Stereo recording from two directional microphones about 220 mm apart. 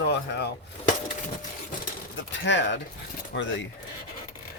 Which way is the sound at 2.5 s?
55° left (ahead or behind).